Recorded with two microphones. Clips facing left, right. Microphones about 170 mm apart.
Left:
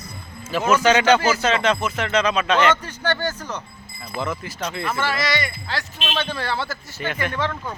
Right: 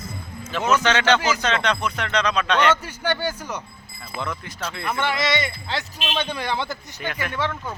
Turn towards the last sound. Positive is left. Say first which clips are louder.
# left 2 dB
turn(degrees=-10)  # may be behind; listen again after turning